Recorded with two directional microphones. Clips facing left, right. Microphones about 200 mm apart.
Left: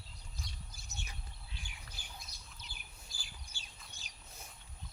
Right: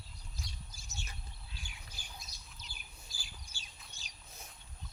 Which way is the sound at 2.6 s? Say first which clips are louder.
Even; 55° left (ahead or behind).